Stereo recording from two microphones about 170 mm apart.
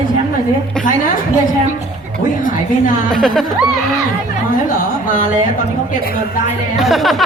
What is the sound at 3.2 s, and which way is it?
Music, centre (ahead or behind).